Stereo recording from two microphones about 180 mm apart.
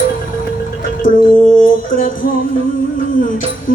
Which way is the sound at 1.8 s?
50° left (ahead or behind).